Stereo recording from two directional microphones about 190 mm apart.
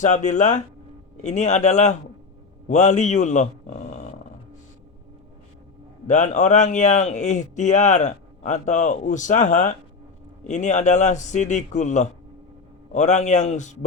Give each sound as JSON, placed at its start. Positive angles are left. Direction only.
{"t": 0.0, "sound": "a man's voice", "side_deg": 40}
{"t": 6.1, "sound": "a man's voice", "side_deg": 40}